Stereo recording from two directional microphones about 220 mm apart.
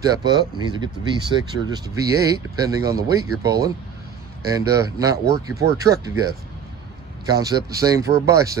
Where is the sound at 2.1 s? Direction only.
15° right (ahead or behind).